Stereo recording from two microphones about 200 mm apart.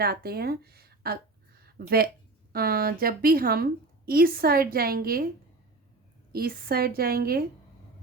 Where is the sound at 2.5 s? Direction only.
50° right (ahead or behind).